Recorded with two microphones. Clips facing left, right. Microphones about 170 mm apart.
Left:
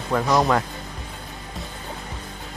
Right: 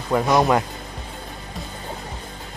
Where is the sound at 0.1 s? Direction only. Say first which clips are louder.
Right 2 dB; 20° right (ahead or behind).